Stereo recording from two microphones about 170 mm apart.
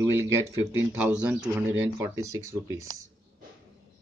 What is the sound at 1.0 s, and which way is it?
Speech, 5° right (ahead or behind).